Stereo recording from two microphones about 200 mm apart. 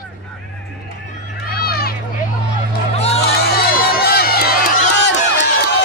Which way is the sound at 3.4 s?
50° left (ahead or behind).